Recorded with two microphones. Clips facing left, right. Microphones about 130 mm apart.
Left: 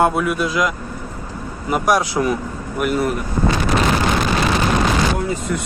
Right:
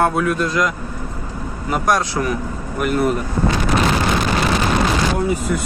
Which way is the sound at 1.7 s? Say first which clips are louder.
Left 1 dB; 10° left (ahead or behind).